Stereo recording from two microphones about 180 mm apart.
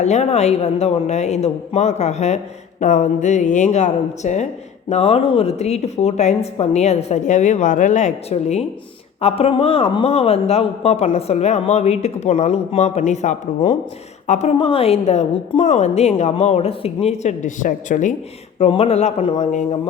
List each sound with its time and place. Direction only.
0.0 s speech: 40° left (ahead or behind)